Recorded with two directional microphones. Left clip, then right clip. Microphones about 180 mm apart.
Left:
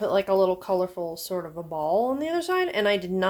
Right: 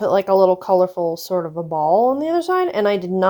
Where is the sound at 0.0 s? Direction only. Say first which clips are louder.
Right 7 dB; 45° right (ahead or behind).